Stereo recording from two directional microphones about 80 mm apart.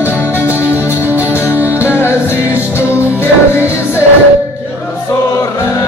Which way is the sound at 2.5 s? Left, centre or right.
Right.